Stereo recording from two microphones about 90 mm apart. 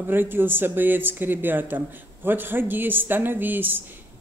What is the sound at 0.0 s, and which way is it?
Speech, 20° right (ahead or behind).